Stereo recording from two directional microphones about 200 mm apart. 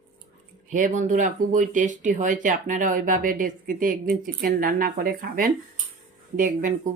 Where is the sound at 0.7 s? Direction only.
40° right (ahead or behind).